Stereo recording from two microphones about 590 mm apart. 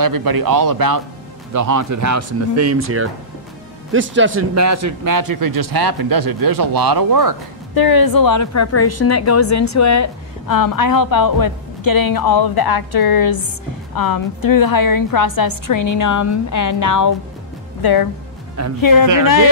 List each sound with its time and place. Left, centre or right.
0.0 s speech: right
7.7 s a woman's voice: left
18.8 s a woman's voice: left